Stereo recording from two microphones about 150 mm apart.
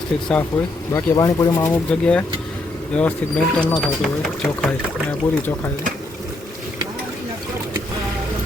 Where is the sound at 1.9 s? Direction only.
5° left (ahead or behind).